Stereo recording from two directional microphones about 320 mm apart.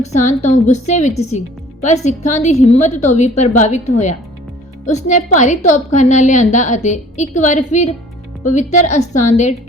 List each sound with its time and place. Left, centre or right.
0.0 s a woman's voice: left